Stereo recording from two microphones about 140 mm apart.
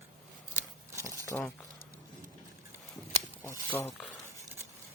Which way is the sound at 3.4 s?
20° left (ahead or behind).